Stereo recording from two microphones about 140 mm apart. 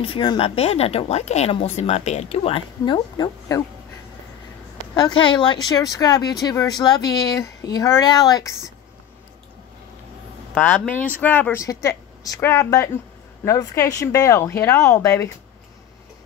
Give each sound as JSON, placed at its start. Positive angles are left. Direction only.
{"t": 0.0, "sound": "speech", "side_deg": 35}
{"t": 2.8, "sound": "speech", "side_deg": 30}
{"t": 4.9, "sound": "speech", "side_deg": 30}
{"t": 10.5, "sound": "speech", "side_deg": 10}